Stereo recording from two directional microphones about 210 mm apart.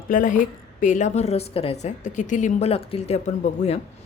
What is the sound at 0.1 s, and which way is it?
A woman's voice, 40° left (ahead or behind).